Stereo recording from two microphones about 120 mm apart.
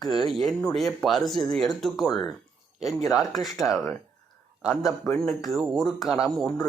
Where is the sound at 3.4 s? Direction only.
Centre (ahead or behind).